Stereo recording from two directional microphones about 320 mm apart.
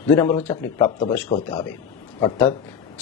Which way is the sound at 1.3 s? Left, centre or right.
Centre.